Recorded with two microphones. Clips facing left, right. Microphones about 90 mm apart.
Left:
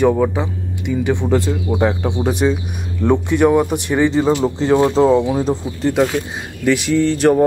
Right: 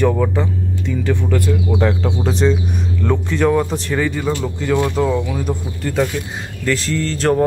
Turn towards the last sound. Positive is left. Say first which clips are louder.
# left 4 dB
turn(degrees=10)  # may be behind; listen again after turning